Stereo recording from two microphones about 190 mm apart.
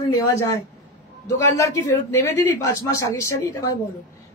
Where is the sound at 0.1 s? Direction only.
15° left (ahead or behind).